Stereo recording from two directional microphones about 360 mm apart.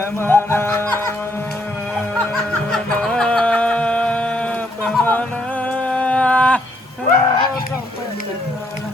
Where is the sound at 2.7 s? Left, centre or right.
Centre.